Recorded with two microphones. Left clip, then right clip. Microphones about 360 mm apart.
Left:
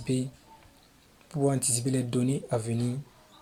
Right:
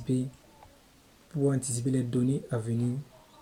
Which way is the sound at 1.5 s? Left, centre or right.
Centre.